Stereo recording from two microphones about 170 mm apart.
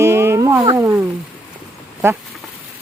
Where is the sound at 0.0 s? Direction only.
15° right (ahead or behind).